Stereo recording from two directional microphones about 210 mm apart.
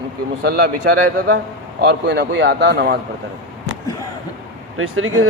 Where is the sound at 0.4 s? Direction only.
50° right (ahead or behind).